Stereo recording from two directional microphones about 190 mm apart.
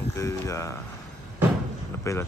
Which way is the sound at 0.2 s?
15° left (ahead or behind).